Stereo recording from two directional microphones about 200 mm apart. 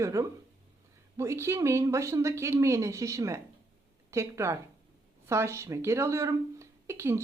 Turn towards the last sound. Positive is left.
turn(degrees=-15)  # may be behind; listen again after turning